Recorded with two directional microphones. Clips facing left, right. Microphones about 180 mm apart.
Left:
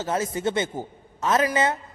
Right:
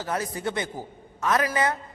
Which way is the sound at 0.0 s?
25° left (ahead or behind).